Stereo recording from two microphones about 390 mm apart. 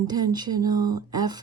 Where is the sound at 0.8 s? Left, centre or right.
Right.